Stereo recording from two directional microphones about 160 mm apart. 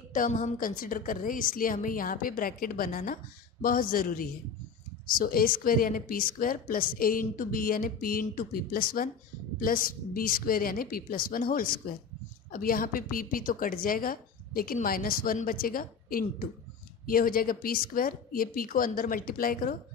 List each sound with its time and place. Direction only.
0.1 s a woman's voice: 55° left (ahead or behind)